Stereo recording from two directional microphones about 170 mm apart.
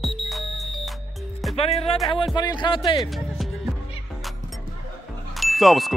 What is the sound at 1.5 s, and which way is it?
Speech, 35° left (ahead or behind).